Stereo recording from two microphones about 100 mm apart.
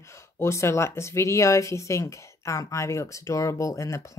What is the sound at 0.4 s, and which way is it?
Speech, 25° left (ahead or behind).